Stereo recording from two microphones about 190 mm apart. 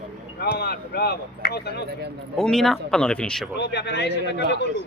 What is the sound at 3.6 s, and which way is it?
Speech, 60° left (ahead or behind).